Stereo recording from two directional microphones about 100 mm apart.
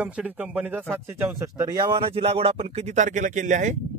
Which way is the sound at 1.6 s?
45° right (ahead or behind).